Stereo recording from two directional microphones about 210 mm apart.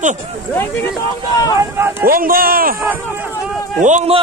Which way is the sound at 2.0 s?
45° right (ahead or behind).